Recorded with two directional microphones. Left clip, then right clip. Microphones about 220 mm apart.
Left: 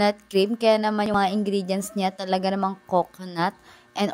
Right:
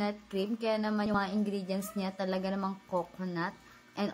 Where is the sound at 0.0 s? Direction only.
45° left (ahead or behind).